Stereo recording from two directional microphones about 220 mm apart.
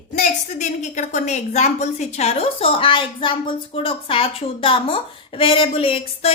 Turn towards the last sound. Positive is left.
turn(degrees=25)  # may be behind; listen again after turning